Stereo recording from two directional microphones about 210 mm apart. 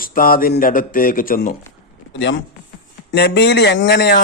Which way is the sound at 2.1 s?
60° left (ahead or behind).